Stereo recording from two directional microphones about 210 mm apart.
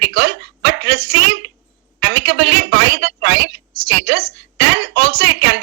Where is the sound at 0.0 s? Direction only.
55° right (ahead or behind).